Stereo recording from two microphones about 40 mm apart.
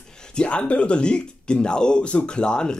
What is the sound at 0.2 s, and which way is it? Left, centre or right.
Speech, left.